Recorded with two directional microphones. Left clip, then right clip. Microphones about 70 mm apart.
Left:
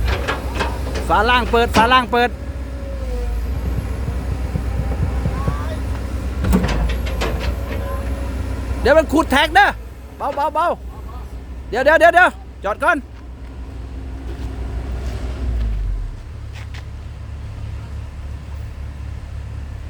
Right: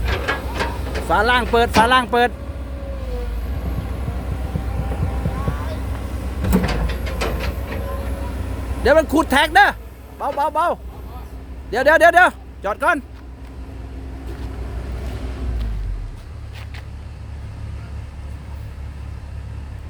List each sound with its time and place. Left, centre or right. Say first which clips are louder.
0.0 s a sound: even; right
1.0 s speech: left 1 dB; centre
3.8 s vehicle: left 1 dB; left; by 6.4 s centre
6.6 s vehicle: left 1 dB; right
8.0 s vehicle: left 1 dB; centre
8.8 s a man's voice: left 1 dB; centre